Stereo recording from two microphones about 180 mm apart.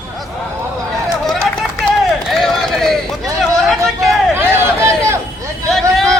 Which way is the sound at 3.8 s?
Centre (ahead or behind).